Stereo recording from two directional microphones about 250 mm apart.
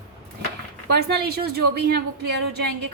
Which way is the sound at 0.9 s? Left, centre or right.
Right.